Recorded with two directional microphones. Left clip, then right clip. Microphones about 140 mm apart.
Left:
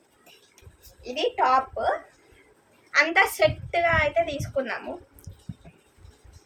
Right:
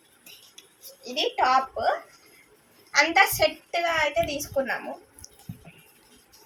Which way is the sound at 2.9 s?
10° left (ahead or behind).